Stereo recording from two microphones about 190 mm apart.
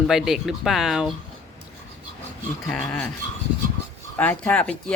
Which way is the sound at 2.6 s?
5° left (ahead or behind).